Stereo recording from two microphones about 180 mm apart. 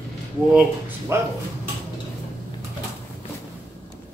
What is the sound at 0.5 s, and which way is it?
Speech, 10° right (ahead or behind).